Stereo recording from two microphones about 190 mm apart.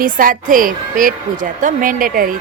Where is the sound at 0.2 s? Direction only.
45° right (ahead or behind).